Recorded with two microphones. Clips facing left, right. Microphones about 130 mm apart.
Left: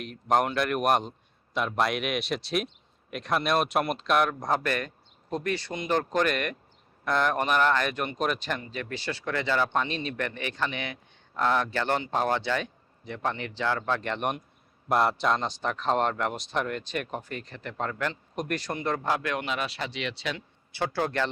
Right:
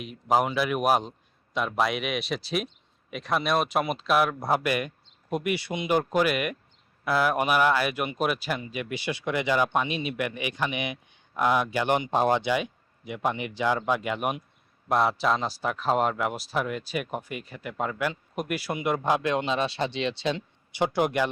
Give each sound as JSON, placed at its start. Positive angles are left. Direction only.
{"t": 0.0, "sound": "a man's voice", "side_deg": -5}